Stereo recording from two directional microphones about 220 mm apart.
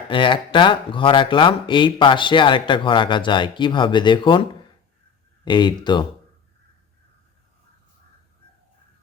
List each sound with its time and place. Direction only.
0.1 s speech: 20° left (ahead or behind)
5.5 s speech: 20° left (ahead or behind)